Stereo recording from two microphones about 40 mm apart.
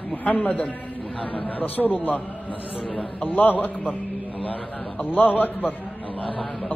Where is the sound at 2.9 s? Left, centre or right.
Left.